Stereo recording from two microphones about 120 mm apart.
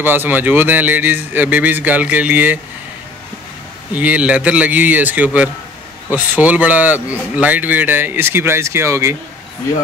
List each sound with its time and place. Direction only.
0.0 s speech: 15° right (ahead or behind)
3.9 s speech: 10° right (ahead or behind)